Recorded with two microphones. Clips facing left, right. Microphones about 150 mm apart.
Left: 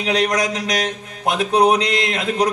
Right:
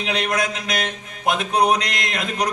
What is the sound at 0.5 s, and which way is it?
Mantra, 35° left (ahead or behind).